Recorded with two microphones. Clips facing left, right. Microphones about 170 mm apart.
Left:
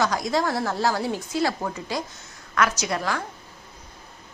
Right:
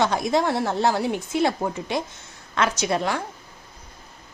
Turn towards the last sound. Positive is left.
turn(degrees=-25)  # may be behind; listen again after turning